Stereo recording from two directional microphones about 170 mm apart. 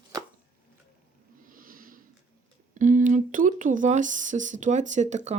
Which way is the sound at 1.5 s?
55° right (ahead or behind).